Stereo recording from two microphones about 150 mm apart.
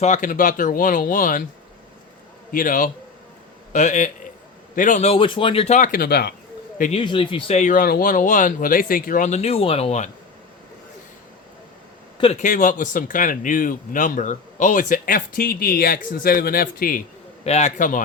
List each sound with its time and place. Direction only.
0.0 s speech: 55° left (ahead or behind)
2.5 s a man's voice: 65° left (ahead or behind)
3.7 s a man's voice: 55° left (ahead or behind); by 6.3 s 90° left
6.9 s speech: 35° left (ahead or behind)
7.5 s speech: 60° left (ahead or behind)
12.1 s a sound: 40° left (ahead or behind)
12.4 s speech: 60° left (ahead or behind)
17.4 s speech: 45° left (ahead or behind); by 18.0 s 60° left (ahead or behind)